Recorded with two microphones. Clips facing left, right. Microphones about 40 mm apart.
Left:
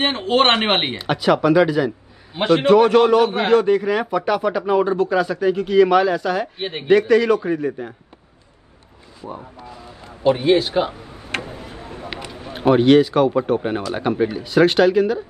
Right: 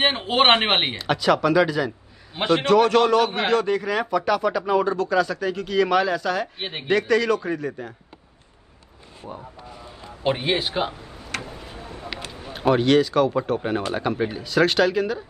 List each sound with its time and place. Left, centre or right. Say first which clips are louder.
0.0 s speech: left 2 dB; centre
0.7 s speech: left 2 dB; centre
0.9 s speech: left 2 dB; centre
2.6 s speech: left 4 dB; centre
3.3 s speech: left 5 dB; centre
7.0 s speech: left 5 dB; centre
9.2 s speech: left 4 dB; centre
10.2 s speech: left 6 dB; right
10.8 s speech: left 5 dB; centre
11.3 s tick-tock: left 5 dB; left
12.1 s run: left 1 dB; centre
12.5 s speech: left 5 dB; centre